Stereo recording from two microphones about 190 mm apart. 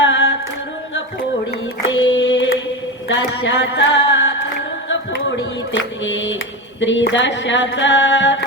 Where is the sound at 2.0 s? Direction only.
80° left.